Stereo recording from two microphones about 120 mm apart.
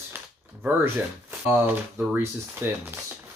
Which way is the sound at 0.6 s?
15° right (ahead or behind).